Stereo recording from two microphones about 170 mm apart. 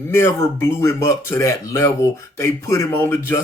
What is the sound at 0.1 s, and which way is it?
Speech, 15° left (ahead or behind).